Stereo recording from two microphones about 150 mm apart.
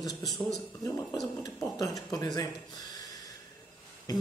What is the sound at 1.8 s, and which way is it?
Speech, 25° left (ahead or behind).